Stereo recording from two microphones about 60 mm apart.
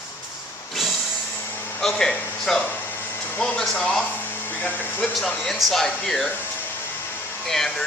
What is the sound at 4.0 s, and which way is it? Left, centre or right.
Speech, left.